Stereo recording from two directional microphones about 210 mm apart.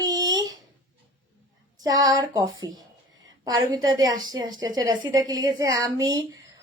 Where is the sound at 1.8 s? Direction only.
15° right (ahead or behind).